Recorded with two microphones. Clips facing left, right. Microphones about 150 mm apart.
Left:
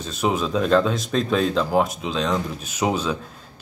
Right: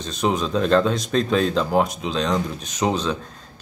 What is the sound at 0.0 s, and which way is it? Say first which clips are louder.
Speech: even; 5° left (ahead or behind).